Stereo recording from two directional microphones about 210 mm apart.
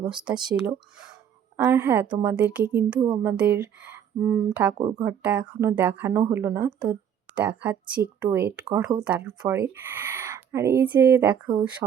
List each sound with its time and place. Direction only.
0.1 s speech: 5° right (ahead or behind)
3.0 s speech: 20° right (ahead or behind)
3.3 s speech: 10° right (ahead or behind)
5.2 s speech: 5° right (ahead or behind)